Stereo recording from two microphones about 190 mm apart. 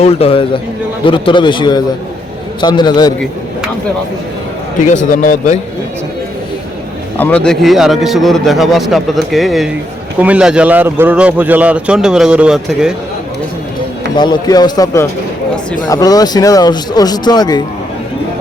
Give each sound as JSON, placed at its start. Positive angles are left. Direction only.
{"t": 0.0, "sound": "a man's voice", "side_deg": 30}
{"t": 4.9, "sound": "a man's voice", "side_deg": 40}
{"t": 7.2, "sound": "a man's voice", "side_deg": 10}
{"t": 14.2, "sound": "speech", "side_deg": 20}